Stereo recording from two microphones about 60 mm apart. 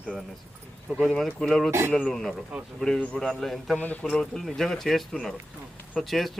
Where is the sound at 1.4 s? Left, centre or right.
Centre.